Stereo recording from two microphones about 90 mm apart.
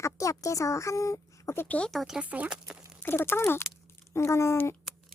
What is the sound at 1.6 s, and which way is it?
Speech, 15° left (ahead or behind).